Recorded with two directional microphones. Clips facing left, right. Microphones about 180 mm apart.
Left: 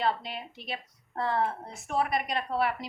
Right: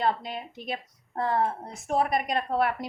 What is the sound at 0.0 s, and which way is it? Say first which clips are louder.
A woman's voice: right 2 dB; 50° right (ahead or behind).